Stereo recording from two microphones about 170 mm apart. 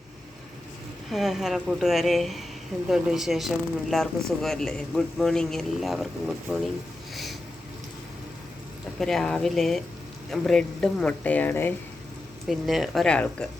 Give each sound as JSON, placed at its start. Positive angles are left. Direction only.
{"t": 1.1, "sound": "speech", "side_deg": 0}
{"t": 9.0, "sound": "speech", "side_deg": 0}
{"t": 12.5, "sound": "speech", "side_deg": 0}